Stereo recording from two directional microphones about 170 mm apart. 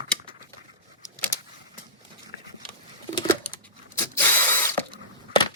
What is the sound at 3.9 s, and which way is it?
Spray, 15° left (ahead or behind).